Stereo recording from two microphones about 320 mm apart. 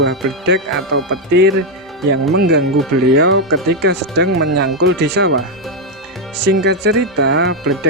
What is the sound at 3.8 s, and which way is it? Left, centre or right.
Speech, right.